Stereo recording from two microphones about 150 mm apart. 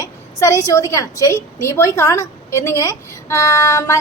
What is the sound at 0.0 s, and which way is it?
A woman's voice, 20° left (ahead or behind).